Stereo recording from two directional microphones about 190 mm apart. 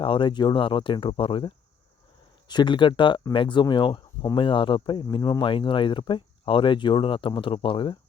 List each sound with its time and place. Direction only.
0.0 s speech: 25° left (ahead or behind)